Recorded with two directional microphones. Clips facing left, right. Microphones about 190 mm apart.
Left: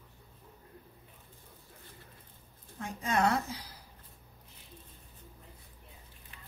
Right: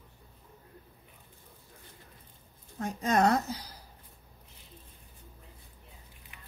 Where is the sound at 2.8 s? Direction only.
40° right (ahead or behind).